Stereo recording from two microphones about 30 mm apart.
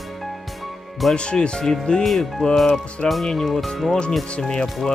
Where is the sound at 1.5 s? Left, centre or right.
Centre.